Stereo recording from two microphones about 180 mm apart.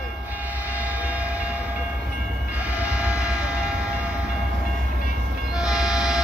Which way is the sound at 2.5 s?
10° right (ahead or behind).